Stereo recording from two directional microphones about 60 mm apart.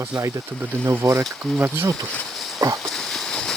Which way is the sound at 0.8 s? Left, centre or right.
Right.